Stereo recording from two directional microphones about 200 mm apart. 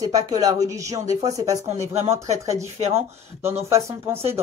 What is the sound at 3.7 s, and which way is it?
Speech, 15° right (ahead or behind).